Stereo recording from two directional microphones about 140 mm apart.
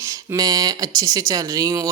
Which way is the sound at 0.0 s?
25° right (ahead or behind).